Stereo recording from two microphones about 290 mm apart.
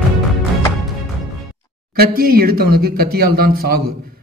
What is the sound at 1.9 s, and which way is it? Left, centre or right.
A man's voice, right.